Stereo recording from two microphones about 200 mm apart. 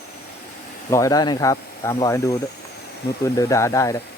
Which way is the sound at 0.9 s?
15° left (ahead or behind).